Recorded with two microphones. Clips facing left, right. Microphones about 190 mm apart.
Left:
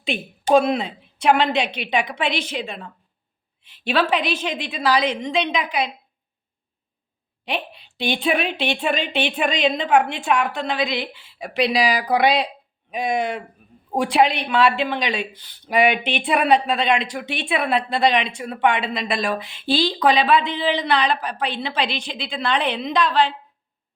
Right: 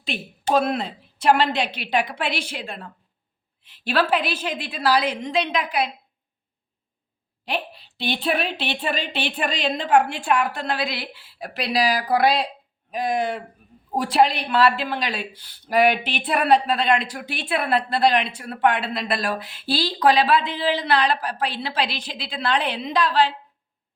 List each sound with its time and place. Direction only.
0.5 s a woman's voice: 5° right (ahead or behind)
3.9 s speech: 5° right (ahead or behind)
7.9 s speech: 5° right (ahead or behind)
13.9 s speech: centre (ahead or behind)